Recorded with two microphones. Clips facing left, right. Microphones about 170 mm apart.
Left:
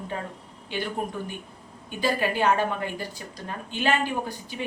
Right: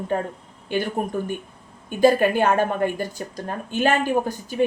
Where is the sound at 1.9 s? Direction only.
50° right (ahead or behind).